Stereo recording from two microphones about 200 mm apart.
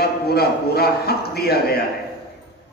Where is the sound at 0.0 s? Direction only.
50° left (ahead or behind).